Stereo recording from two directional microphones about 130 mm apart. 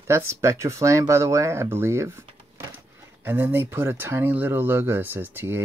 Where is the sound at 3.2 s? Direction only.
15° right (ahead or behind).